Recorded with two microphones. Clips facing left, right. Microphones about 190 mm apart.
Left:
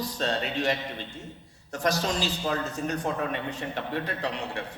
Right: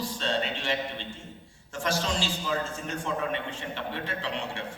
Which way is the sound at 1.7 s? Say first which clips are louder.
Left 2 dB; 40° left (ahead or behind).